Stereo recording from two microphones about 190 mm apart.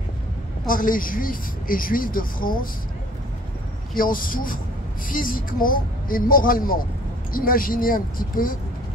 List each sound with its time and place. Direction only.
0.7 s speech: 45° left (ahead or behind)
3.9 s speech: 45° left (ahead or behind)